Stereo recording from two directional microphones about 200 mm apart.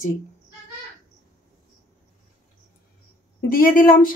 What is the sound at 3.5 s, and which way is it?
Speech, 45° left (ahead or behind).